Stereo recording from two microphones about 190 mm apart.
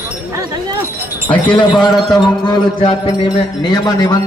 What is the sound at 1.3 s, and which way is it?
A man's voice, 25° left (ahead or behind).